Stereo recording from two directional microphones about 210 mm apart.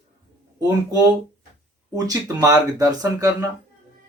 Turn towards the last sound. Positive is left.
turn(degrees=-15)  # may be behind; listen again after turning